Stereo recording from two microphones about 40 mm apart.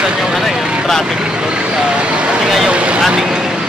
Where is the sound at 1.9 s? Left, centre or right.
Right.